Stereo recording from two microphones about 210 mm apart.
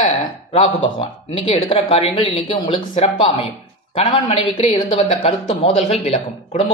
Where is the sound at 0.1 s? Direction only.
30° left (ahead or behind).